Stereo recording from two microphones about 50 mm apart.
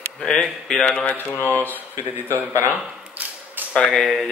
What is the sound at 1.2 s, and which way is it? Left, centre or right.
Speech, left.